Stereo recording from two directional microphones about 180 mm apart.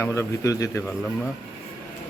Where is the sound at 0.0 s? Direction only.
15° left (ahead or behind).